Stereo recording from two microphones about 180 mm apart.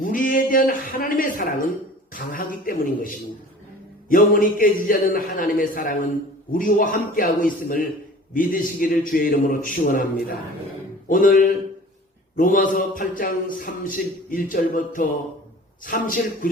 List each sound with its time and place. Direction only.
0.0 s a man's voice: 50° left (ahead or behind)